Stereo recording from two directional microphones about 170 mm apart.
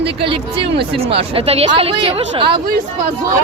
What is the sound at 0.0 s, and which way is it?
Speech, 35° right (ahead or behind).